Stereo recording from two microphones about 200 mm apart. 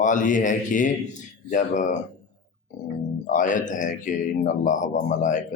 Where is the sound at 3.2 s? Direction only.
40° left (ahead or behind).